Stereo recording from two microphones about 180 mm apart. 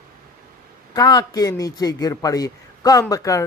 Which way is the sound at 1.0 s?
20° left (ahead or behind).